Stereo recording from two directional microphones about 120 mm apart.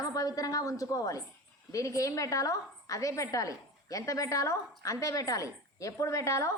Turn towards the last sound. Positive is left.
turn(degrees=25)  # may be behind; listen again after turning